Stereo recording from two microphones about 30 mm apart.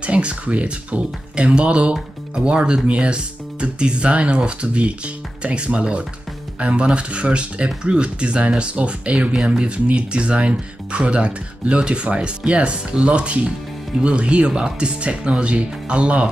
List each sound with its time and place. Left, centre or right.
0.0 s speech: right
9.4 s speech: right